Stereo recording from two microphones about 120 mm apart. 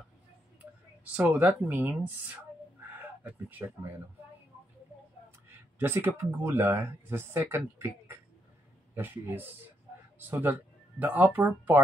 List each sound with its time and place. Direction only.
1.1 s speech: 15° right (ahead or behind)
3.0 s a sound: 15° right (ahead or behind)
5.8 s speech: 20° right (ahead or behind)
8.9 s speech: 15° right (ahead or behind)